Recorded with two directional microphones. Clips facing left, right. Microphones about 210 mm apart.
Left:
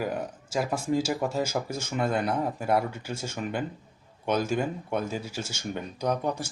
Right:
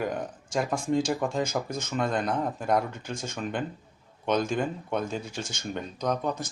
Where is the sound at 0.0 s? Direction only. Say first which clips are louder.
Even; 5° left (ahead or behind).